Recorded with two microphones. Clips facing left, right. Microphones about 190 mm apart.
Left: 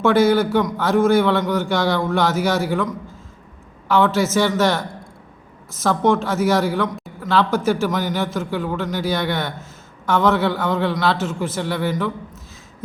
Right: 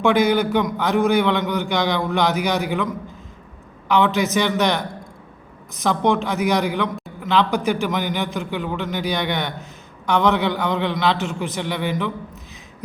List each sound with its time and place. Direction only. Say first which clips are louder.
0.0 s a man's voice: left 2 dB; 15° right (ahead or behind)
3.8 s a man's voice: left 1 dB; 15° right (ahead or behind)
6.8 s a sound: left 1 dB; centre (ahead or behind)
7.3 s a man's voice: left 1 dB; 15° right (ahead or behind)